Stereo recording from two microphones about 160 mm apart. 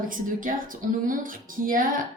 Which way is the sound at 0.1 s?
60° right (ahead or behind).